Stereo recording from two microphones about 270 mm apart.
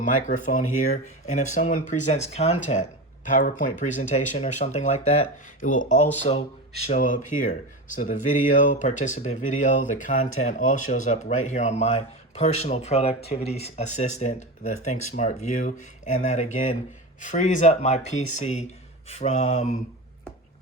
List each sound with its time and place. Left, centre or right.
0.0 s speech: left